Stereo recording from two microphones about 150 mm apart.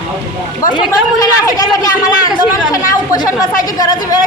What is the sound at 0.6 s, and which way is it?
Speech, 25° left (ahead or behind).